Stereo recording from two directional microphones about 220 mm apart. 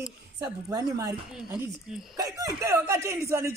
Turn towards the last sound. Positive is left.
turn(degrees=-10)  # may be behind; listen again after turning